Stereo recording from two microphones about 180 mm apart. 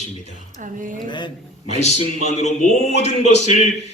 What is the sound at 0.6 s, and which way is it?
Speech, 45° right (ahead or behind).